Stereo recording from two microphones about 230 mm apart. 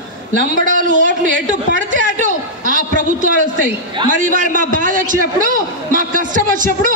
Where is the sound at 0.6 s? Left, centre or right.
Right.